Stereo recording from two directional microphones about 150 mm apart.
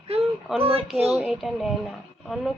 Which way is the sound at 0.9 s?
45° right (ahead or behind).